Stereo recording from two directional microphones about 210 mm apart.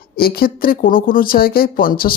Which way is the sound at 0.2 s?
45° left (ahead or behind).